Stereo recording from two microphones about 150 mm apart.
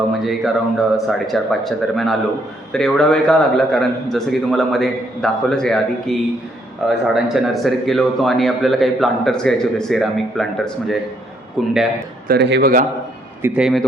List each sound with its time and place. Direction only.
0.1 s speech: centre (ahead or behind)
12.3 s a man's voice: 90° right
13.4 s speech: 5° right (ahead or behind)